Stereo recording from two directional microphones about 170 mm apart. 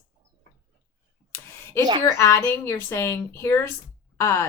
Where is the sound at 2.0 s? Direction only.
15° left (ahead or behind).